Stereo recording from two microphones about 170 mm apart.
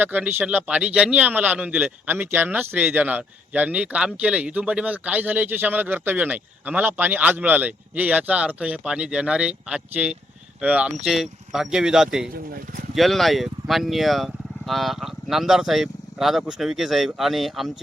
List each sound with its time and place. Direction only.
0.0 s a man's voice: 10° right (ahead or behind)
12.3 s speech: 60° right (ahead or behind)
12.9 s speech: centre (ahead or behind)